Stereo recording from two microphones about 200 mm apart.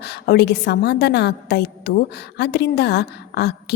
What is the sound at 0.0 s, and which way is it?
A woman's voice, 55° left (ahead or behind).